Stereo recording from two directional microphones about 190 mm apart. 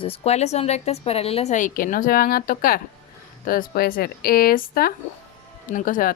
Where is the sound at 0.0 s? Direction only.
30° left (ahead or behind).